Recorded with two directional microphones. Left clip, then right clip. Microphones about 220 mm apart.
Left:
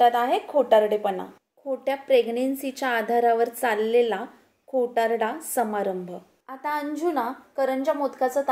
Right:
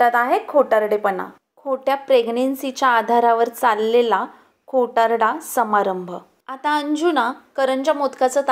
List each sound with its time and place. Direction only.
0.0 s speech: 45° right (ahead or behind)
1.7 s a woman's voice: 10° right (ahead or behind)
6.4 s a woman's voice: 25° right (ahead or behind)